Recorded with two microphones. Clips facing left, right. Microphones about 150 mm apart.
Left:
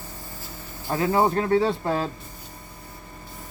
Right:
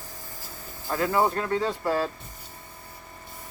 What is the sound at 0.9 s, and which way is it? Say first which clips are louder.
Speech: left 3 dB; 25° left (ahead or behind).